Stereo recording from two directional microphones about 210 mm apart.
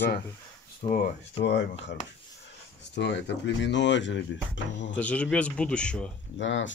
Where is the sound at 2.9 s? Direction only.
55° left (ahead or behind).